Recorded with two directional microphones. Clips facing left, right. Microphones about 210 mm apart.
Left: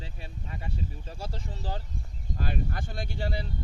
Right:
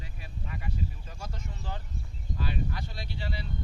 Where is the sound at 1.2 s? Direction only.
35° left (ahead or behind).